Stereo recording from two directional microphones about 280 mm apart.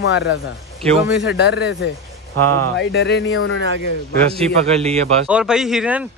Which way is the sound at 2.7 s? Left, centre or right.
Left.